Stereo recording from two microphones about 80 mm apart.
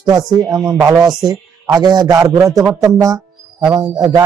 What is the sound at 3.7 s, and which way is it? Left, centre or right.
Speech, right.